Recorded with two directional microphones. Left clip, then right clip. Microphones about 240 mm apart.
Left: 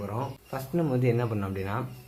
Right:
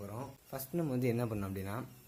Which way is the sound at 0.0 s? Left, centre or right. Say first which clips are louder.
Left 11 dB; right.